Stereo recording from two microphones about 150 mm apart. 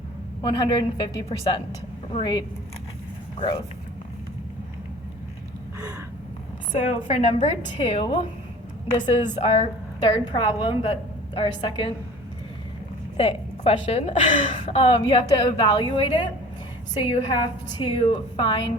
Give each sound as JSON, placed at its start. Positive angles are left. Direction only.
{"t": 0.4, "sound": "a woman's voice", "side_deg": 30}
{"t": 3.3, "sound": "speech", "side_deg": 30}
{"t": 6.7, "sound": "a woman's voice", "side_deg": 50}
{"t": 8.9, "sound": "a woman's voice", "side_deg": 50}
{"t": 10.0, "sound": "a woman's voice", "side_deg": 30}
{"t": 13.1, "sound": "a woman's voice", "side_deg": 40}
{"t": 14.7, "sound": "a woman's voice", "side_deg": 40}